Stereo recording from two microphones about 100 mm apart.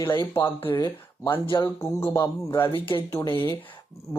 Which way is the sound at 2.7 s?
65° left (ahead or behind).